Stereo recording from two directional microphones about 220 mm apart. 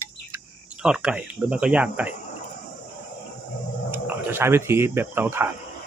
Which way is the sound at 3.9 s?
10° right (ahead or behind).